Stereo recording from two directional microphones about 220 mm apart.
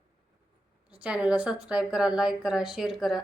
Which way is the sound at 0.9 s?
5° right (ahead or behind).